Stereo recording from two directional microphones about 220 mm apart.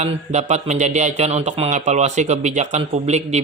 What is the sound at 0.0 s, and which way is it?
Speech, 30° right (ahead or behind).